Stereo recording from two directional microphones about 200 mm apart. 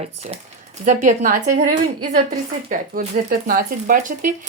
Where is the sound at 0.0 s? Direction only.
35° right (ahead or behind).